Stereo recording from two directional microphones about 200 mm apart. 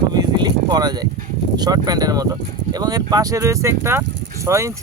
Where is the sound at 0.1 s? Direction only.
20° right (ahead or behind).